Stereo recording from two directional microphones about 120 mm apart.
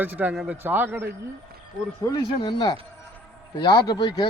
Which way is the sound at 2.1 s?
35° left (ahead or behind).